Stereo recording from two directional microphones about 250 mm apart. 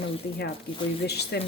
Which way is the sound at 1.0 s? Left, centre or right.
Left.